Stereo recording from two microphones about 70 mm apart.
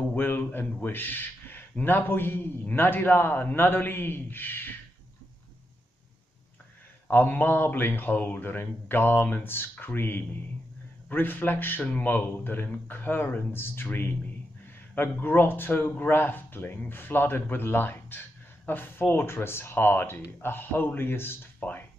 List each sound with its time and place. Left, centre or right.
0.1 s a man's voice: left
7.1 s a man's voice: left
21.5 s a sound: left